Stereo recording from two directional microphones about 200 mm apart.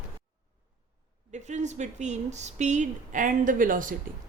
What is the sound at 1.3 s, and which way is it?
Speech, 35° right (ahead or behind).